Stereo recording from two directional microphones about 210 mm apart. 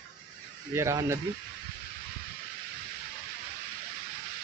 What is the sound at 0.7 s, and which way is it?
Speech, 15° right (ahead or behind).